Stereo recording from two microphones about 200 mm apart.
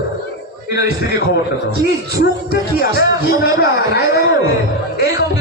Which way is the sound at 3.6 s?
55° left (ahead or behind).